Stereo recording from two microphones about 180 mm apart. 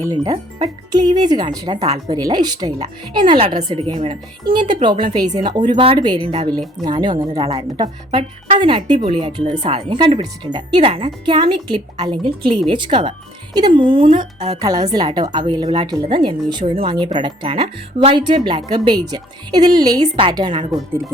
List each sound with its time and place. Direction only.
0.0 s a woman's voice: 20° right (ahead or behind)